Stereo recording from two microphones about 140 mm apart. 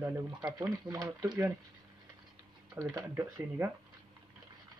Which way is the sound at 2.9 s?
20° right (ahead or behind).